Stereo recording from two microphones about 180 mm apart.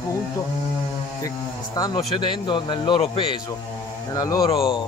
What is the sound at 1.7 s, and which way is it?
A man's voice, 20° left (ahead or behind).